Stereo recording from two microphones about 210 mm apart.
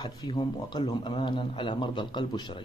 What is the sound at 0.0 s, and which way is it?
A man's voice, 20° left (ahead or behind).